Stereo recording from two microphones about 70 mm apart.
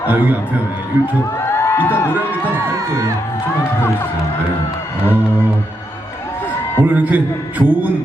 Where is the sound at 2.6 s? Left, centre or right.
Right.